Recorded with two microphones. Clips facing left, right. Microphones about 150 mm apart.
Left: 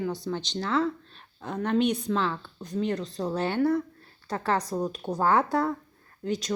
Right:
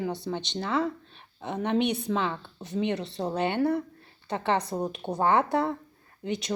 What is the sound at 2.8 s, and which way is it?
Speech, 75° right (ahead or behind).